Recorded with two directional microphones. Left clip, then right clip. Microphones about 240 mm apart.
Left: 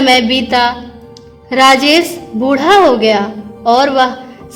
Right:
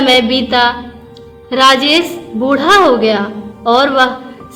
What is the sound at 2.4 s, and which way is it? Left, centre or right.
A woman's voice, left.